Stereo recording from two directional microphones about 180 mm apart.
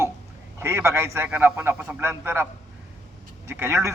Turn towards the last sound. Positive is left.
turn(degrees=-15)  # may be behind; listen again after turning